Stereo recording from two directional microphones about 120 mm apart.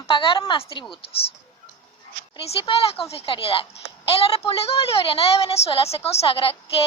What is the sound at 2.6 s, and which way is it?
A woman's voice, 50° left (ahead or behind).